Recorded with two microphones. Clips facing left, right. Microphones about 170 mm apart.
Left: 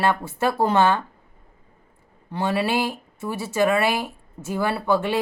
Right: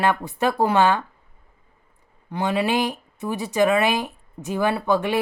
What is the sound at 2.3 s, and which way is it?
Speech, 15° right (ahead or behind).